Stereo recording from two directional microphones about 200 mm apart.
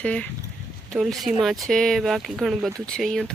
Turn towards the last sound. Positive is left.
turn(degrees=0)  # may be behind; listen again after turning